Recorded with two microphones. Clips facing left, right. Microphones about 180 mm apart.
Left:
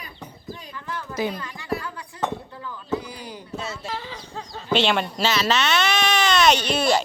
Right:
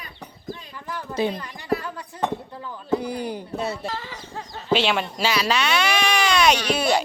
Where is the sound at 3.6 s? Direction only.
60° right (ahead or behind).